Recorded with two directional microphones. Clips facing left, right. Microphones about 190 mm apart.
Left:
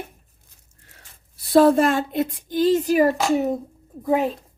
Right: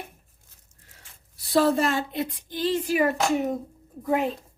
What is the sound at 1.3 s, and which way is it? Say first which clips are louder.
A woman's voice: left 6 dB; 55° left (ahead or behind).